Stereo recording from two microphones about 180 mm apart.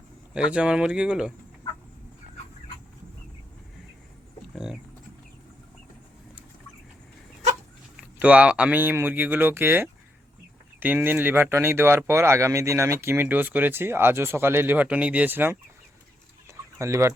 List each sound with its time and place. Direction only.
0.3 s speech: 5° right (ahead or behind)
4.5 s a sound: 5° right (ahead or behind)
8.0 s speech: 10° right (ahead or behind)
16.7 s speech: 15° right (ahead or behind)